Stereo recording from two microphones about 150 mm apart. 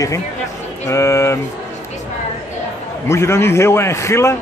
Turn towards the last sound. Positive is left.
turn(degrees=20)  # may be behind; listen again after turning